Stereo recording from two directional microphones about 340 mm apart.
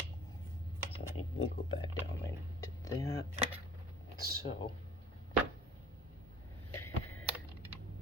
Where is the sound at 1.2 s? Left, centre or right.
Left.